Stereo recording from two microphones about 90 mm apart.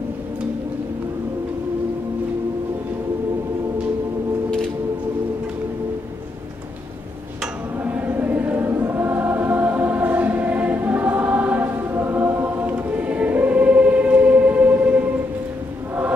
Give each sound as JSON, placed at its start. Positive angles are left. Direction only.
{"t": 7.8, "sound": "choir", "side_deg": -20}